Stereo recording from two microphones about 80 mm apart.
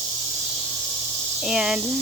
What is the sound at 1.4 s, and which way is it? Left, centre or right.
Speech, centre.